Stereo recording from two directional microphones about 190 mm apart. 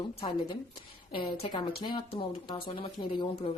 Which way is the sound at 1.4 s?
25° left (ahead or behind).